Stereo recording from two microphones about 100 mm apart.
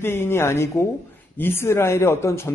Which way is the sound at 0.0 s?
25° left (ahead or behind).